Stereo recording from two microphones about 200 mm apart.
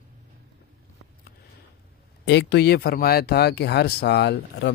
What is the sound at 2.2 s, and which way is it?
Speech, 60° left (ahead or behind).